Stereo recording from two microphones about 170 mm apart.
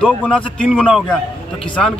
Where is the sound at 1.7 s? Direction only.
5° left (ahead or behind).